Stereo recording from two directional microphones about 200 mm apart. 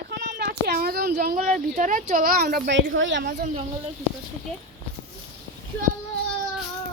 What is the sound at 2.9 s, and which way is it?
Speech, 70° right (ahead or behind).